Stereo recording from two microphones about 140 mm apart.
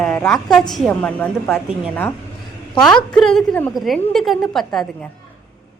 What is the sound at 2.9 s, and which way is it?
Speech, 5° left (ahead or behind).